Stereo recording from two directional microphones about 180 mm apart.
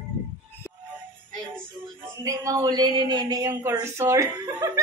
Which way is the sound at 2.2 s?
20° right (ahead or behind).